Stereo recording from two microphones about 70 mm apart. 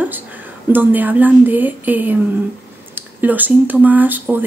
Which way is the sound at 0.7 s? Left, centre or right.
Right.